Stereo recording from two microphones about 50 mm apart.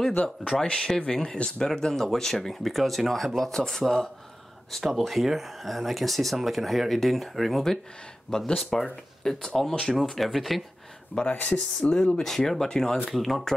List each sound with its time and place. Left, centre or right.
0.1 s speech: left
0.7 s speech: centre
11.3 s speech: left
12.2 s speech: centre